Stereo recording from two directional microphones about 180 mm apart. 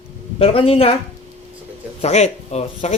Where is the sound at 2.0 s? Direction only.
40° left (ahead or behind).